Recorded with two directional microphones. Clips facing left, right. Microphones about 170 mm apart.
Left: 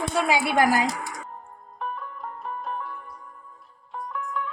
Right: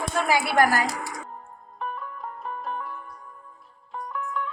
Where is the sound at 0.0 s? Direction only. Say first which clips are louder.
Left 1 dB; 15° left (ahead or behind).